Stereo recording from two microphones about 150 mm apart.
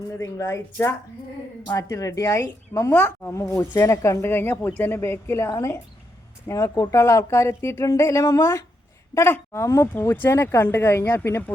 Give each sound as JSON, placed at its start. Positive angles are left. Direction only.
{"t": 0.2, "sound": "speech", "side_deg": 20}